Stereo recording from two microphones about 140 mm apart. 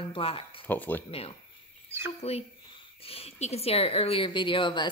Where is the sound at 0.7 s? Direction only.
15° left (ahead or behind).